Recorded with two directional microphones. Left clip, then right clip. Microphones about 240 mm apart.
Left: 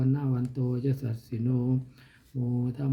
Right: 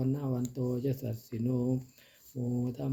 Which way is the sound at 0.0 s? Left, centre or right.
Left.